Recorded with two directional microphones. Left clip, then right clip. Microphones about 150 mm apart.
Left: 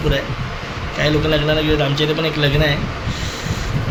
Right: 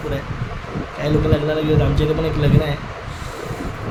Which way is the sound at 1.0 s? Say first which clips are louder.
Left 3 dB; 20° right (ahead or behind).